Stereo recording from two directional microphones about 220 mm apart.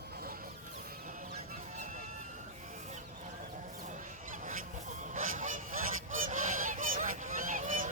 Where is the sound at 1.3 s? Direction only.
35° right (ahead or behind).